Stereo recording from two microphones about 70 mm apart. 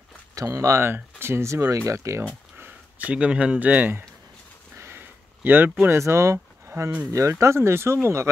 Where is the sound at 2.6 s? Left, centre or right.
Right.